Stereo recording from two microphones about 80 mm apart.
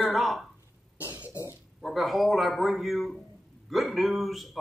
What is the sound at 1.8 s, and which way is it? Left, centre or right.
A man's voice, centre.